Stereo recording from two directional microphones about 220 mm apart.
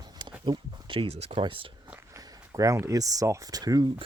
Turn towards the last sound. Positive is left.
turn(degrees=-15)  # may be behind; listen again after turning